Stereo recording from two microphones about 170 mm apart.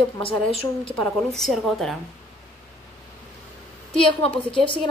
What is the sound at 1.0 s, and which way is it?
Speech, centre (ahead or behind).